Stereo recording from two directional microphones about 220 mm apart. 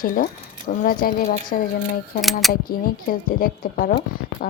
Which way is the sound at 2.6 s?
40° left (ahead or behind).